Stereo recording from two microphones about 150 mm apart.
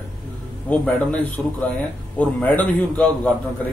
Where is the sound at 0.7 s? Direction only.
10° left (ahead or behind).